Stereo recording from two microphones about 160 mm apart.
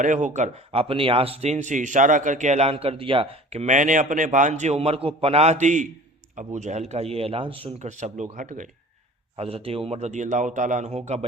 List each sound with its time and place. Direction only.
0.0 s speech: 55° right (ahead or behind)
9.3 s speech: 35° right (ahead or behind)